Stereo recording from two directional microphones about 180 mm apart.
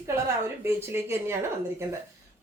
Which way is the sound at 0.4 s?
15° right (ahead or behind).